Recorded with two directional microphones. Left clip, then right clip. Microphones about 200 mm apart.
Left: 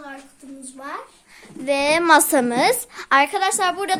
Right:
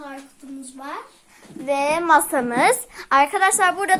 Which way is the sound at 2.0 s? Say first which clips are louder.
Left 2 dB; 35° left (ahead or behind).